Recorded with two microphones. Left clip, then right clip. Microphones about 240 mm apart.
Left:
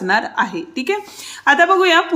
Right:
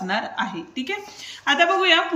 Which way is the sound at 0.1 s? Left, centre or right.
Centre.